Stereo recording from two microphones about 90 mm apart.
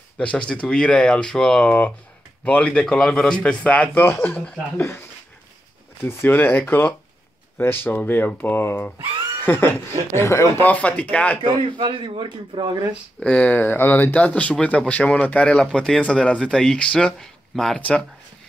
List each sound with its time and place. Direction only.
0.2 s speech: 15° left (ahead or behind)
6.0 s speech: 20° left (ahead or behind)
10.6 s speech: 15° left (ahead or behind)
11.4 s speech: 60° right (ahead or behind)
13.2 s speech: 15° left (ahead or behind)
17.7 s speech: 15° left (ahead or behind)